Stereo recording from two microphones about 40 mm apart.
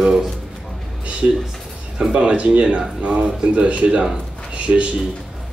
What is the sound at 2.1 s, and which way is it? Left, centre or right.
A man's voice, right.